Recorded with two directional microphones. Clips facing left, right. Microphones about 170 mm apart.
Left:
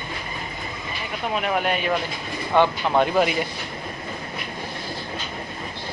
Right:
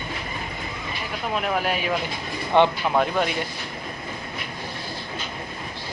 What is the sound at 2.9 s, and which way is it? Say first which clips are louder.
Speech: left 3 dB; 5° left (ahead or behind).